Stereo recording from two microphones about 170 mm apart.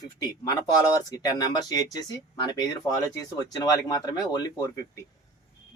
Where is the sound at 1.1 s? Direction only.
20° left (ahead or behind).